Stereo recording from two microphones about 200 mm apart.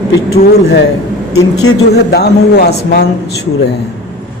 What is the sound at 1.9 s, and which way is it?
Speech, 55° left (ahead or behind).